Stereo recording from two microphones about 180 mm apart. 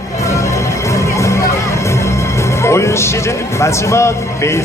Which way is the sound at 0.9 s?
15° left (ahead or behind).